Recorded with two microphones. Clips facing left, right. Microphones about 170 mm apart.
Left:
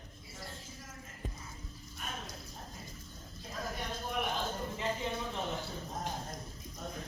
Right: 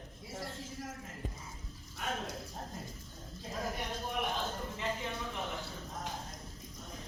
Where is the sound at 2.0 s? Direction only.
75° right (ahead or behind).